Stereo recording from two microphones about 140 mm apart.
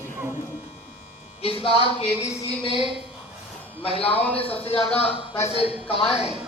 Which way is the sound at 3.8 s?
40° left (ahead or behind).